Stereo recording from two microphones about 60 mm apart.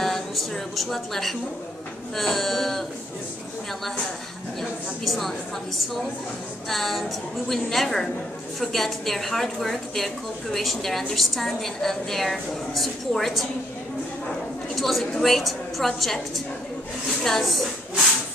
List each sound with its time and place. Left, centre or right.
0.0 s a sound: centre
2.1 s a woman's voice: centre
4.6 s a woman's voice: centre
6.7 s a woman's voice: centre
14.8 s a woman's voice: centre